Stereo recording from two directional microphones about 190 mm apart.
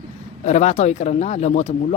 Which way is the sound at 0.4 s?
35° left (ahead or behind).